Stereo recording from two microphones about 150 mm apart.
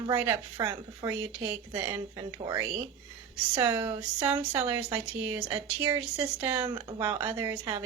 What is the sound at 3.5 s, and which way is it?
A woman's voice, 15° right (ahead or behind).